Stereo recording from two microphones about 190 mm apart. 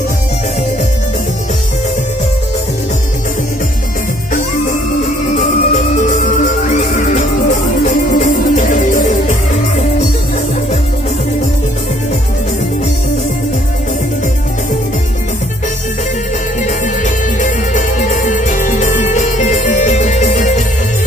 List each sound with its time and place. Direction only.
5.3 s music: 40° left (ahead or behind)
17.4 s music: 40° left (ahead or behind)